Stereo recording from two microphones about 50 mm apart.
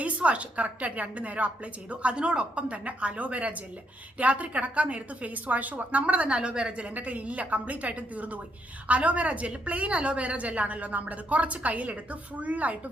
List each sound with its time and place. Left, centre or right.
0.0 s a woman's voice: right